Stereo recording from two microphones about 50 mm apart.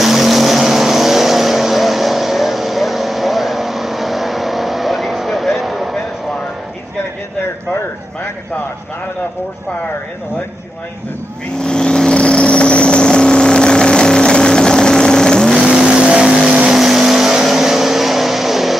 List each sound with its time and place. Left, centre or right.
0.0 s vehicle: centre
11.6 s vehicle: centre
16.0 s vehicle: centre
16.7 s vehicle: centre